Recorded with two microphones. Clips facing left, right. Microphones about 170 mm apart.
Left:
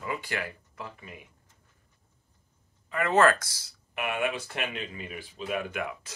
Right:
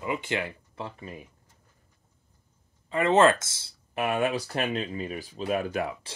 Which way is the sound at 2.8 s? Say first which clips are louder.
Right 3 dB; 25° right (ahead or behind).